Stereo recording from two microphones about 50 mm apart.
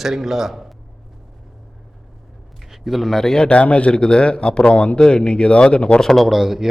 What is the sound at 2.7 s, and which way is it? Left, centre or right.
A man's voice, centre.